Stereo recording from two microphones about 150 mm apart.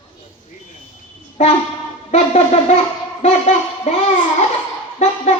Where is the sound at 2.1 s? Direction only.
45° left (ahead or behind).